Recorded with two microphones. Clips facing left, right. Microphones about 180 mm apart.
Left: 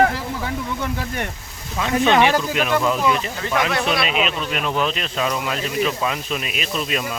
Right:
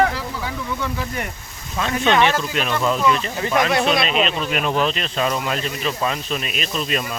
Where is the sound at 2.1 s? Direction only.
15° left (ahead or behind).